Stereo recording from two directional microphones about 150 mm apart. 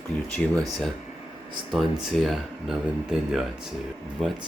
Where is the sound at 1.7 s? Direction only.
Centre (ahead or behind).